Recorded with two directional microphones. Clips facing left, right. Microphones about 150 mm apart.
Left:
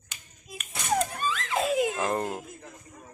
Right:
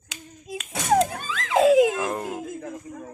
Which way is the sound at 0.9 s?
90° right.